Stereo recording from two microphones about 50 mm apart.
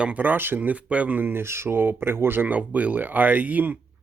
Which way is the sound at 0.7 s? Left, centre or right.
Right.